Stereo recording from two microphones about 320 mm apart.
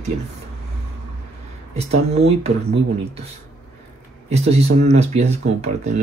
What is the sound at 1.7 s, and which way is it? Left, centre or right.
Speech, centre.